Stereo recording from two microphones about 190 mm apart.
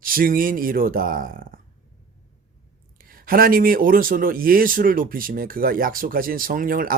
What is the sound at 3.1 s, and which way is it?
A man's voice, 50° right (ahead or behind).